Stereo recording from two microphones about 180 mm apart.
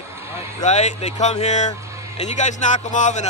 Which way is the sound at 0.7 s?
40° left (ahead or behind).